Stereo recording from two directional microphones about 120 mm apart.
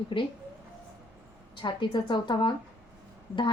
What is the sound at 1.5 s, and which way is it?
A woman's voice, 40° left (ahead or behind).